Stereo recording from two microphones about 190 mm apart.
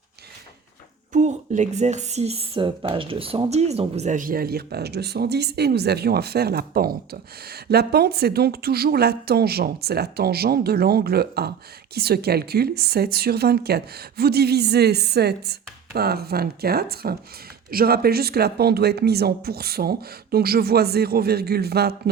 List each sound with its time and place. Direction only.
1.1 s speech: 40° right (ahead or behind); by 22.1 s 55° right (ahead or behind)